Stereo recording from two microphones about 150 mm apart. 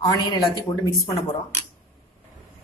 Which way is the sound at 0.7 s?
25° left (ahead or behind).